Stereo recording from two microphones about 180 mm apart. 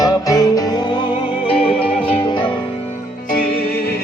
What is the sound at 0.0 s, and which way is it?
Music, 20° left (ahead or behind).